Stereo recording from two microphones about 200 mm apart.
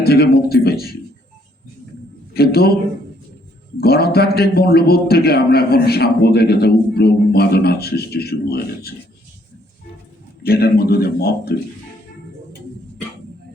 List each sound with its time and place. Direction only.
0.0 s a man's voice: 50° left (ahead or behind)
2.3 s a man's voice: 50° left (ahead or behind)
3.8 s a man's voice: 50° left (ahead or behind)
10.4 s a man's voice: 50° left (ahead or behind)